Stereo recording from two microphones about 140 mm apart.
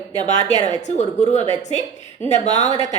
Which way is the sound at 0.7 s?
55° left (ahead or behind).